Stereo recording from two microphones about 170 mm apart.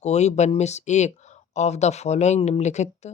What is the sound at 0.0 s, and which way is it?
Speech, 40° left (ahead or behind).